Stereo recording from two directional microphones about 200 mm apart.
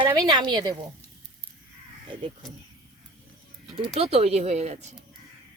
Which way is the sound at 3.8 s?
30° right (ahead or behind).